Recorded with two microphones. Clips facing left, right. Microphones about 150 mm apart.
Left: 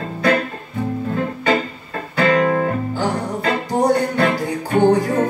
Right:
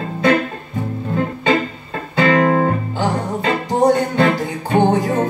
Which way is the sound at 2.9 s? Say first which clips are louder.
Right 1 dB; 25° right (ahead or behind).